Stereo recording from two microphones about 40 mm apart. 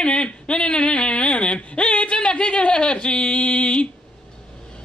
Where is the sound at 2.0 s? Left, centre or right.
Left.